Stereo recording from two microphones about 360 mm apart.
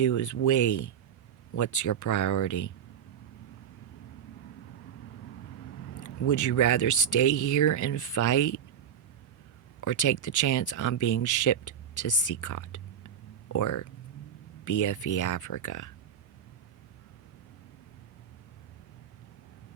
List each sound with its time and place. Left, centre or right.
0.0 s speech: left
6.0 s speech: left
9.8 s speech: left